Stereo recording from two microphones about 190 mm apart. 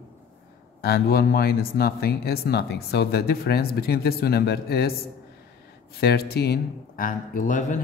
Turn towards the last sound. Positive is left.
turn(degrees=40)  # may be behind; listen again after turning